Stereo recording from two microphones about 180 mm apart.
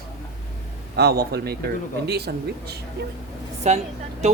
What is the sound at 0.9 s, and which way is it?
Speech, 60° right (ahead or behind).